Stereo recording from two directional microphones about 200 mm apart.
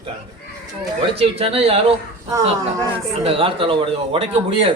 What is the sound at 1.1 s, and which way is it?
Speech, 30° right (ahead or behind).